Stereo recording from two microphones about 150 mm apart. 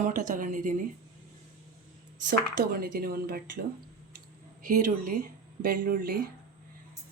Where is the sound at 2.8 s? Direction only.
80° right.